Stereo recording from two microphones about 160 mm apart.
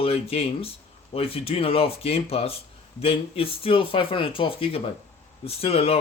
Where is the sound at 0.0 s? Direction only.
35° left (ahead or behind).